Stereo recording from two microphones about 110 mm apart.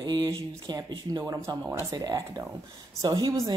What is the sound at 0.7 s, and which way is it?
A woman's voice, 40° right (ahead or behind).